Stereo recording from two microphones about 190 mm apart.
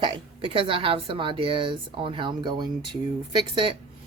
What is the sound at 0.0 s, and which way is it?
Speech, 25° right (ahead or behind).